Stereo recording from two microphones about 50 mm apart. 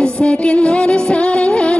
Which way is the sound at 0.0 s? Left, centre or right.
Left.